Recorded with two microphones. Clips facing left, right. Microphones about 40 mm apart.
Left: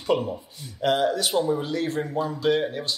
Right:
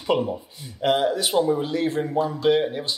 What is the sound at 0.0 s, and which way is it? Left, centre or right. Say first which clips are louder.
Speech: right 1 dB; centre.